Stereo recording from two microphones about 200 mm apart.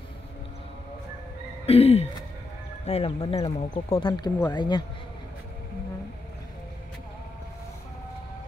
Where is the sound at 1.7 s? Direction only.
30° left (ahead or behind).